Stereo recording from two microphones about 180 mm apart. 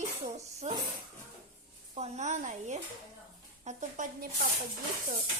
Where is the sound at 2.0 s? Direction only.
40° right (ahead or behind).